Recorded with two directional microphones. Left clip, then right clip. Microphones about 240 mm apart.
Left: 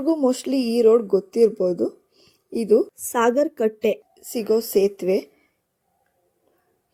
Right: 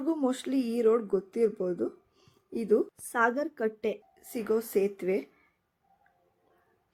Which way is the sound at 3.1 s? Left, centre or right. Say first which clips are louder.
Left 8 dB; centre.